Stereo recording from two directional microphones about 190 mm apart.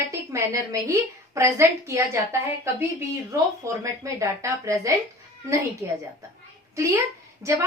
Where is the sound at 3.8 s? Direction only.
15° right (ahead or behind).